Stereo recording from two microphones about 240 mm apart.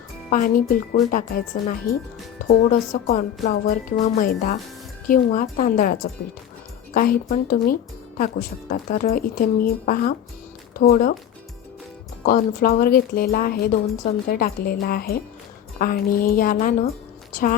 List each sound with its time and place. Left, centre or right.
0.3 s speech: left
12.2 s speech: left